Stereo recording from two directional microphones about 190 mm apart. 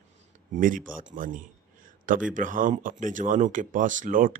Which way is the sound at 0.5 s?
45° right (ahead or behind).